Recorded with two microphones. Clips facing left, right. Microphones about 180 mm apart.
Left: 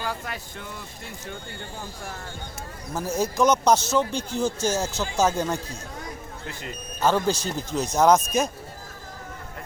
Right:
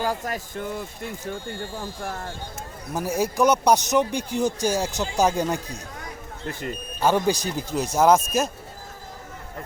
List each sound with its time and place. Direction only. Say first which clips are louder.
0.0 s speech: right 5 dB; 40° right (ahead or behind)
2.9 s speech: right 1 dB; 10° right (ahead or behind)
6.5 s speech: right 7 dB; 50° right (ahead or behind)
7.0 s speech: right 1 dB; 15° right (ahead or behind)